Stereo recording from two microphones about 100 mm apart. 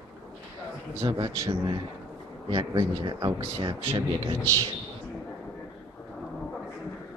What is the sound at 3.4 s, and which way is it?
Speech, 60° right (ahead or behind).